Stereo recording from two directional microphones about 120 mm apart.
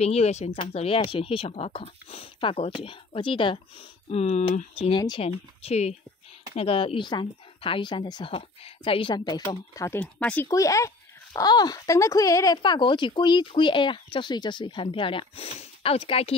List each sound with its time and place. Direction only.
0.0 s speech: 60° left (ahead or behind)
4.9 s speech: 40° left (ahead or behind)
5.2 s speech: 60° left (ahead or behind); by 9.4 s 40° left (ahead or behind)
9.4 s speech: 25° left (ahead or behind)
9.9 s speech: 10° left (ahead or behind)
10.5 s speech: 25° left (ahead or behind)
12.6 s speech: 40° left (ahead or behind)